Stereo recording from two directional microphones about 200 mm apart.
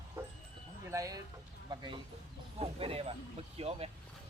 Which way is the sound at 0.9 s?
15° right (ahead or behind).